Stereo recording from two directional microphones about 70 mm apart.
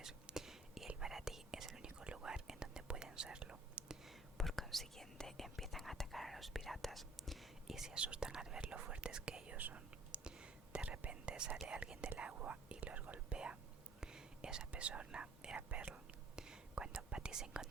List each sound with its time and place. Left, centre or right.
0.0 s whispering: centre
4.0 s whispering: centre
9.5 s whispering: right